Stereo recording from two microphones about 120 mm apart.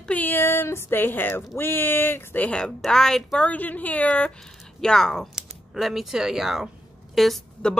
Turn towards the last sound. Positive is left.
turn(degrees=0)  # may be behind; listen again after turning